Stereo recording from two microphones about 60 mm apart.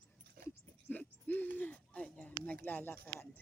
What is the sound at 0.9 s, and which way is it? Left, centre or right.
Speech, left.